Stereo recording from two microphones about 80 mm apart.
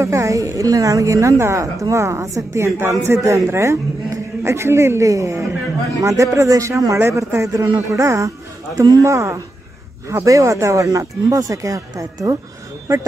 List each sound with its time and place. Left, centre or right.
0.0 s a woman's voice: right
8.7 s speech: right
9.0 s a woman's voice: right